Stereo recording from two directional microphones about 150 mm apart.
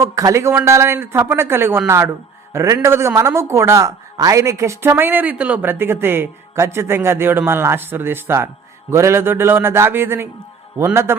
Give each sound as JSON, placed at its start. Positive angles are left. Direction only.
{"t": 0.0, "sound": "a man's voice", "side_deg": -20}